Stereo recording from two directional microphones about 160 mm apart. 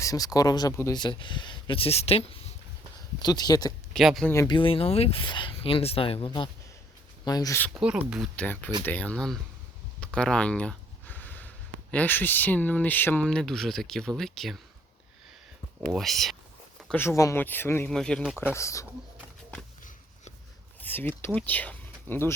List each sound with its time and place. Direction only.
0.0 s speech: 20° left (ahead or behind); by 2.4 s 40° left (ahead or behind)
3.2 s speech: 25° left (ahead or behind)
3.9 s speech: centre (ahead or behind)
4.4 s speech: 30° left (ahead or behind)
7.7 s speech: 5° right (ahead or behind)
8.4 s speech: 10° left (ahead or behind)
15.9 s speech: centre (ahead or behind)
16.9 s speech: 15° left (ahead or behind)
18.3 s speech: 15° left (ahead or behind)
20.8 s a sound: 10° left (ahead or behind)
21.2 s speech: 10° left (ahead or behind)